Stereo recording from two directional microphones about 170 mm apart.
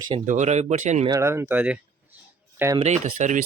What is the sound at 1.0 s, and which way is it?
Speech, 20° right (ahead or behind).